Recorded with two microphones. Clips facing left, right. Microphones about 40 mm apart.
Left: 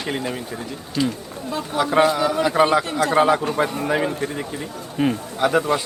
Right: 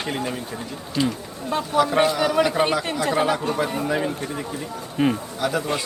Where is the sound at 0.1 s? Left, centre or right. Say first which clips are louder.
Left 4 dB; centre.